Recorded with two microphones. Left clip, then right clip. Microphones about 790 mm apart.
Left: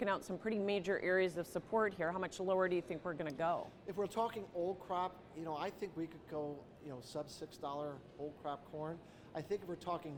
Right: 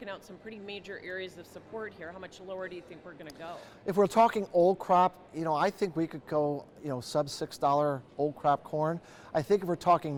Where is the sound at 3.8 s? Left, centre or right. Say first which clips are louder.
Right 18 dB; right.